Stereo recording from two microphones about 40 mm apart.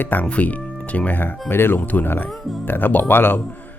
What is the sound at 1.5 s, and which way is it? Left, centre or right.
Speech, left.